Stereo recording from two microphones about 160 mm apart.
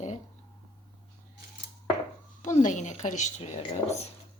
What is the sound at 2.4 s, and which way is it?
Speech, 50° left (ahead or behind).